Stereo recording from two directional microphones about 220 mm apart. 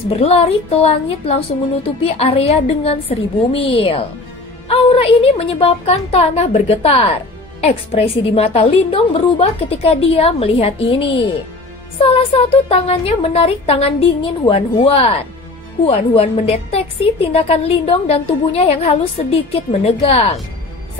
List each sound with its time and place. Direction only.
0.2 s speech: 25° left (ahead or behind)